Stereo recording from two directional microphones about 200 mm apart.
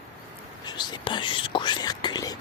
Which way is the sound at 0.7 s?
20° left (ahead or behind).